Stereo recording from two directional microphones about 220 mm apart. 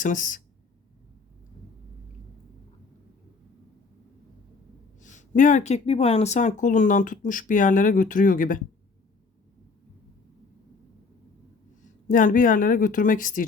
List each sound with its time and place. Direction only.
0.0 s speech: 35° left (ahead or behind)
4.9 s speech: 35° left (ahead or behind)
12.0 s speech: 40° left (ahead or behind)